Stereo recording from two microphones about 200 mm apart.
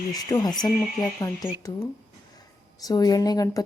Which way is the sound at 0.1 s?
20° left (ahead or behind).